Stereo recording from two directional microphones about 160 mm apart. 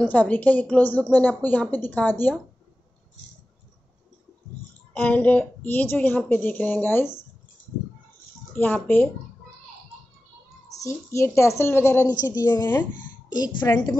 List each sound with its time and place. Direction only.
0.0 s a woman's voice: 10° left (ahead or behind)
4.9 s a woman's voice: 10° left (ahead or behind)
8.5 s a woman's voice: 10° left (ahead or behind)
10.8 s a woman's voice: 15° left (ahead or behind)